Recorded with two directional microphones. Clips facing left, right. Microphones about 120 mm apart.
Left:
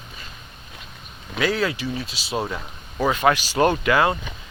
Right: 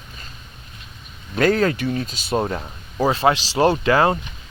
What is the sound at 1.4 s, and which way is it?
Speech, 50° right (ahead or behind).